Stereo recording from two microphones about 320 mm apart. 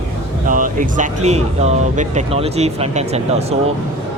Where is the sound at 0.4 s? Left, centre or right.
Right.